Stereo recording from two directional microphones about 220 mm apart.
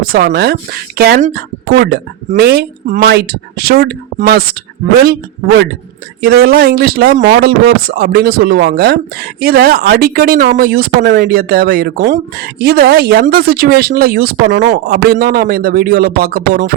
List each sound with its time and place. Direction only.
0.0 s speech: 45° right (ahead or behind)
6.2 s speech: 45° right (ahead or behind)